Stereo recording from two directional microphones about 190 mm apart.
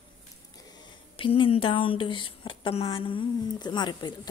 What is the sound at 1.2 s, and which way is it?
Speech, 30° left (ahead or behind).